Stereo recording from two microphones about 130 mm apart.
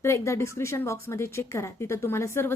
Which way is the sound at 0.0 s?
20° left (ahead or behind).